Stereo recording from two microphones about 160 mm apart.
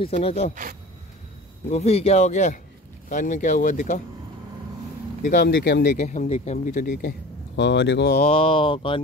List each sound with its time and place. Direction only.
0.0 s speech: 40° left (ahead or behind)
1.7 s a man's voice: 40° left (ahead or behind)
5.2 s speech: 65° left (ahead or behind)
5.9 s a man's voice: 50° left (ahead or behind); by 8.2 s 80° left
8.2 s speech: 35° left (ahead or behind)